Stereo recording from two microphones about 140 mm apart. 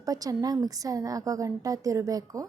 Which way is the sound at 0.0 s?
25° right (ahead or behind).